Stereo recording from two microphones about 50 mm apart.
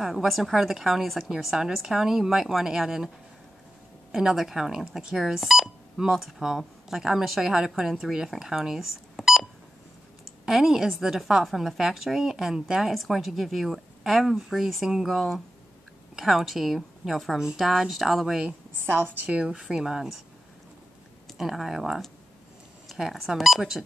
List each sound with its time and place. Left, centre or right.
0.0 s a woman's voice: centre
4.1 s a woman's voice: centre
18.8 s a woman's voice: right
19.2 s speech: right
21.4 s a woman's voice: centre